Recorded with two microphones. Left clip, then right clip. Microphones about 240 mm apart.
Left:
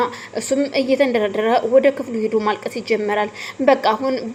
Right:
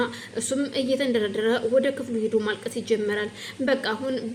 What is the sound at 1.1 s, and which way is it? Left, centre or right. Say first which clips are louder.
Speech: left 6 dB; centre.